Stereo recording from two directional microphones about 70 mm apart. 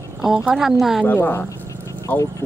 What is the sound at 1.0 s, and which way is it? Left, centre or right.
Speech, left.